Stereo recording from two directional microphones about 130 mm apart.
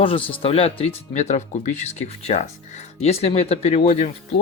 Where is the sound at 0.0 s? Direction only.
45° left (ahead or behind).